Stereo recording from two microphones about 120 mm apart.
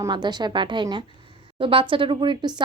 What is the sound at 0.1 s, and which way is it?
Speech, 35° right (ahead or behind).